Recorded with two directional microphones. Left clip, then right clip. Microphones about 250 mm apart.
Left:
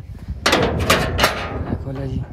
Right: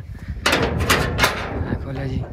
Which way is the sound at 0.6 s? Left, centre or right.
Centre.